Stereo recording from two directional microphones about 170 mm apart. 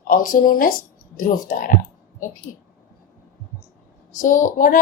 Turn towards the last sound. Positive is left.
turn(degrees=50)  # may be behind; listen again after turning